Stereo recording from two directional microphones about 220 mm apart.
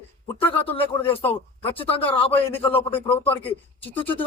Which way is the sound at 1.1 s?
25° left (ahead or behind).